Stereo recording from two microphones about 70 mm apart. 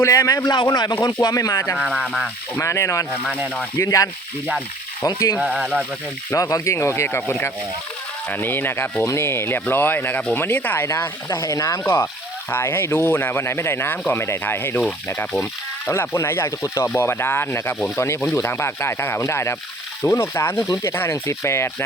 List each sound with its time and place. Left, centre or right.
0.0 s speech: left
0.4 s speech: left
1.0 s speech: left
2.6 s speech: left
5.4 s speech: centre
6.3 s speech: left
11.3 s speech: left
11.8 s speech: left
15.9 s speech: left